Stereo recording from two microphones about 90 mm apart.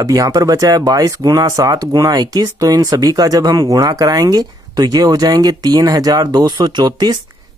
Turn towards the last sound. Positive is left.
turn(degrees=-55)  # may be behind; listen again after turning